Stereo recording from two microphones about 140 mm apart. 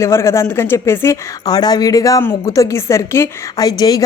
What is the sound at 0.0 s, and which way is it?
Speech, 20° left (ahead or behind).